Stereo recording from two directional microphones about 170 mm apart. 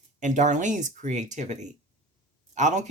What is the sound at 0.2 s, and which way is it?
Speech, 45° right (ahead or behind).